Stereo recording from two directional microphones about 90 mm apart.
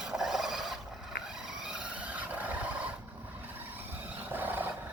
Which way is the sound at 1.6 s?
10° right (ahead or behind).